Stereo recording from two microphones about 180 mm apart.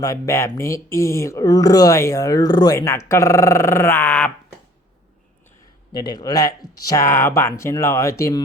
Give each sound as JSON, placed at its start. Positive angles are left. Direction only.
{"t": 0.0, "sound": "speech", "side_deg": 15}
{"t": 5.9, "sound": "speech", "side_deg": 25}